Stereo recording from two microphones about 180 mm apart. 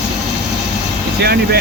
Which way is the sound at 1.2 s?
65° right (ahead or behind).